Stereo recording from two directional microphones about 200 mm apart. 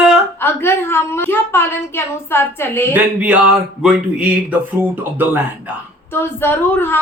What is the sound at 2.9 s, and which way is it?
Speech, 5° right (ahead or behind).